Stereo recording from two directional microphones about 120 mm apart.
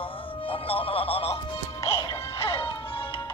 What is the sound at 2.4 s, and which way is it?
Music, 50° left (ahead or behind).